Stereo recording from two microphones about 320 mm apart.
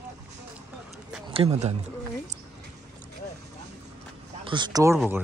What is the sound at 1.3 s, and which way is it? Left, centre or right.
Speech, centre.